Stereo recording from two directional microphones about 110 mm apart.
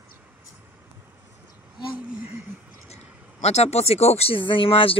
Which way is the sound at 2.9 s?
80° left.